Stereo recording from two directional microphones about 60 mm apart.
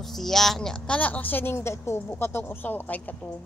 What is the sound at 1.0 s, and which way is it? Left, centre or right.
Speech, left.